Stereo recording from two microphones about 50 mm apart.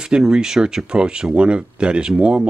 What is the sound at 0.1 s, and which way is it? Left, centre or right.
Speech, centre.